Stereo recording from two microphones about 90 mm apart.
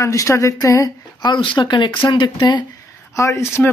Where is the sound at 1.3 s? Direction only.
65° left (ahead or behind).